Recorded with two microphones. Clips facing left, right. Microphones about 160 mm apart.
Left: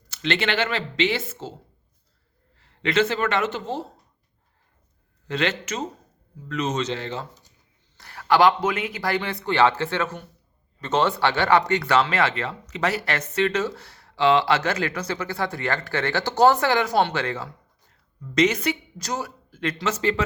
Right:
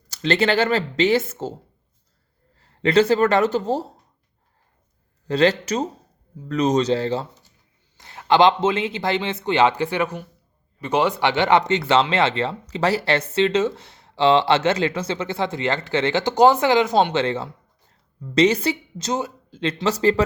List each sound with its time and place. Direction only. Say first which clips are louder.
0.1 s speech: right 5 dB; 40° right (ahead or behind)
2.6 s speech: right 5 dB; 40° right (ahead or behind)
5.3 s speech: right 7 dB; 35° right (ahead or behind)
7.9 s speech: right 2 dB; 20° right (ahead or behind); by 20.2 s 35° right (ahead or behind)